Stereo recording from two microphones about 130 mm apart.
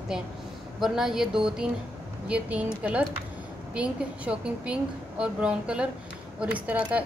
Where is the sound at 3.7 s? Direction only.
10° right (ahead or behind).